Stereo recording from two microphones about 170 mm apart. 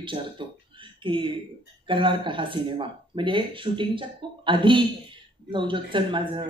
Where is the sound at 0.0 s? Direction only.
30° right (ahead or behind).